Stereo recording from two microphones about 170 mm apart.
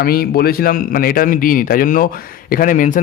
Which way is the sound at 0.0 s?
60° left (ahead or behind).